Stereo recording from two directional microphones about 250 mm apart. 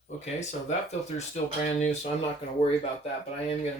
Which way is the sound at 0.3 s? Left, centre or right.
Left.